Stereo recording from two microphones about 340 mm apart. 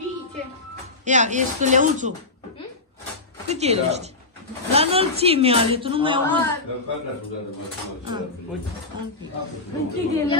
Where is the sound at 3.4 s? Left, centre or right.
Centre.